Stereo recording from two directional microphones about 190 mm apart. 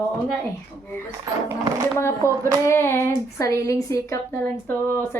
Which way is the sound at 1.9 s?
15° left (ahead or behind).